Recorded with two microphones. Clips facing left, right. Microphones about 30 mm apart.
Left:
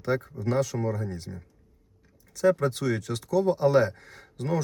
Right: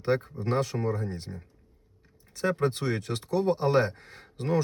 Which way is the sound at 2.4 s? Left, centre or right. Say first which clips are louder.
Left 4 dB; right.